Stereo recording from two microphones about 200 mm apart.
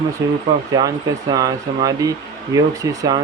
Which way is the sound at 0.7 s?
20° right (ahead or behind).